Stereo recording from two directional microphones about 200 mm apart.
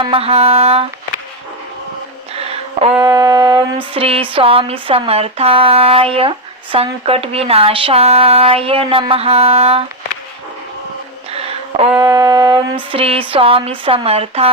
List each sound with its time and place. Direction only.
0.0 s speech: 30° right (ahead or behind)
2.3 s a sound: 30° right (ahead or behind)
3.0 s speech: 20° right (ahead or behind)
11.3 s a sound: 30° right (ahead or behind)
11.9 s music: 15° right (ahead or behind)
12.9 s speech: 25° right (ahead or behind)